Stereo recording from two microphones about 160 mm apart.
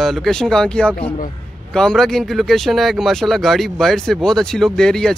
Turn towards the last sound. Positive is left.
turn(degrees=5)  # may be behind; listen again after turning